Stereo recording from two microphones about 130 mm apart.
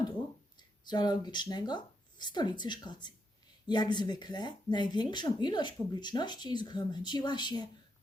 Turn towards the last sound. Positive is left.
turn(degrees=35)  # may be behind; listen again after turning